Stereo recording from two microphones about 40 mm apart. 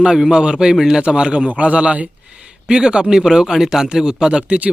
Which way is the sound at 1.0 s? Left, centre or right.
Right.